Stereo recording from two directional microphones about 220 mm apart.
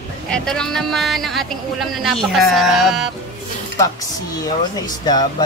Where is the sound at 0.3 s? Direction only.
5° left (ahead or behind).